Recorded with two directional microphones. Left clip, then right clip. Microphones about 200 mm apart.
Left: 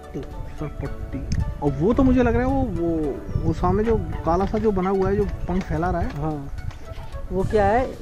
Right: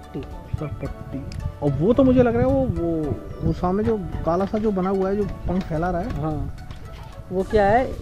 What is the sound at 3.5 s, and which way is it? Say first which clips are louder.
Speech: left 1 dB; 35° right (ahead or behind).